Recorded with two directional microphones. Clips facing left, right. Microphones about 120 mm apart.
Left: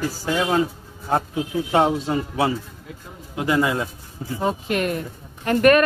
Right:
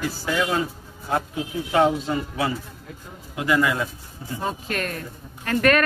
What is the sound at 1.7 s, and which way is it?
A man's voice, 30° left (ahead or behind).